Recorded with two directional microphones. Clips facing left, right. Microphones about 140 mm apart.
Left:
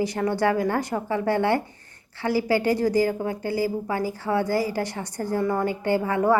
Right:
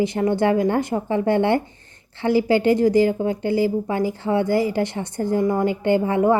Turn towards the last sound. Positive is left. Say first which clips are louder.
# right 4 dB
turn(degrees=-20)  # may be behind; listen again after turning